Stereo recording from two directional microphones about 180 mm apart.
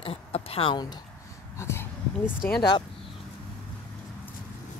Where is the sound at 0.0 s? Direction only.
35° left (ahead or behind).